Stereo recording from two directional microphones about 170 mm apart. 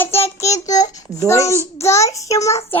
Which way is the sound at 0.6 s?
20° left (ahead or behind).